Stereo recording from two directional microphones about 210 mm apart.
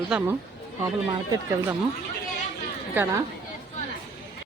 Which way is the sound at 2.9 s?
10° right (ahead or behind).